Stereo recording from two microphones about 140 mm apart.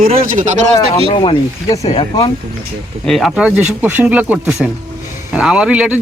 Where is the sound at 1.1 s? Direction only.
40° left (ahead or behind).